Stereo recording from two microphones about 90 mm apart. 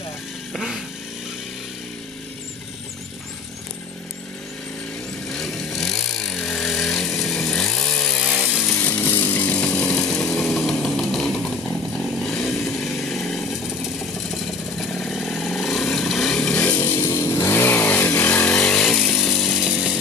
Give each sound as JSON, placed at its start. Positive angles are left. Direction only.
{"t": 0.5, "sound": "vehicle", "side_deg": -5}
{"t": 5.3, "sound": "vehicle", "side_deg": 5}
{"t": 8.6, "sound": "chainsaw", "side_deg": 20}
{"t": 16.5, "sound": "a sound", "side_deg": 15}
{"t": 17.0, "sound": "chainsaw", "side_deg": 30}
{"t": 19.6, "sound": "chainsaw", "side_deg": -10}